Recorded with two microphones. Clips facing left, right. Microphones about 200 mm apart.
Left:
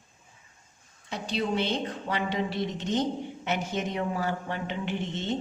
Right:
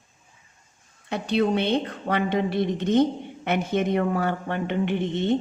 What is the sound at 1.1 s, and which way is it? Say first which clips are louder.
A woman's voice: right 7 dB; 60° right (ahead or behind).